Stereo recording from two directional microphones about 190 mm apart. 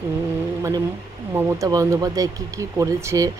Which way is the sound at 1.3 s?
15° right (ahead or behind).